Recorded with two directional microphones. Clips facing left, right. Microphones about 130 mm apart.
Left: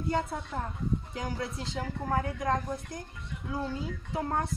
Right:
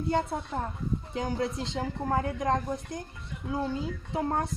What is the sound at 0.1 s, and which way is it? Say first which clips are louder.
Speech: right 2 dB; 25° right (ahead or behind).